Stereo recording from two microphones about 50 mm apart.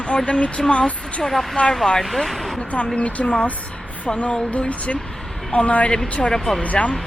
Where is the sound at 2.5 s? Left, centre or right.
Centre.